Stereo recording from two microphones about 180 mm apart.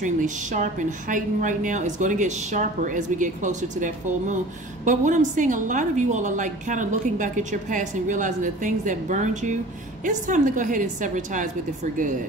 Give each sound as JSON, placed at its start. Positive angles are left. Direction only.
{"t": 0.0, "sound": "a woman's voice", "side_deg": -45}